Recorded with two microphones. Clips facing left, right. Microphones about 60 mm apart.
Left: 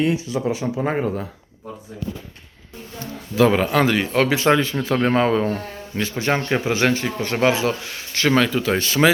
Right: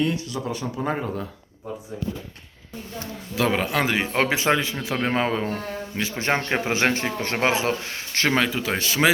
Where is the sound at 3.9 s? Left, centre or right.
Right.